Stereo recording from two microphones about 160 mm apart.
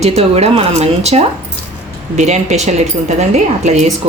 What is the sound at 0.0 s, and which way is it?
Speech, 40° right (ahead or behind).